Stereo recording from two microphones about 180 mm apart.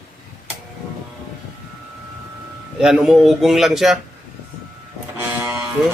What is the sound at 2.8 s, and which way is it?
Speech, centre (ahead or behind).